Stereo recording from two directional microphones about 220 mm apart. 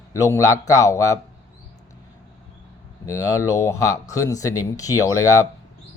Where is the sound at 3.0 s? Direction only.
15° left (ahead or behind).